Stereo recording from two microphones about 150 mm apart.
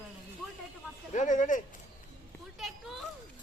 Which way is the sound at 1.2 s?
55° left (ahead or behind).